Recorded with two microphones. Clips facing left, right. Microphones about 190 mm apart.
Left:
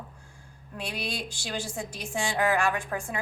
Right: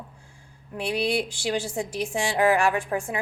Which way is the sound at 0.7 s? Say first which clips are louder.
Right 9 dB; 65° right (ahead or behind).